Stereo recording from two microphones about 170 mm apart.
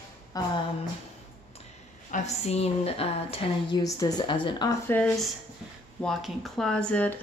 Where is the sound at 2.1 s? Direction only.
40° left (ahead or behind).